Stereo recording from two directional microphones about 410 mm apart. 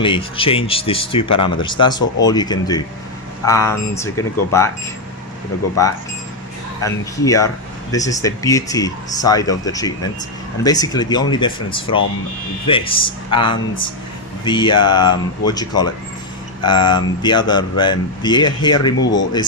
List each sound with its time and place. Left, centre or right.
0.0 s speech: centre
6.8 s speech: centre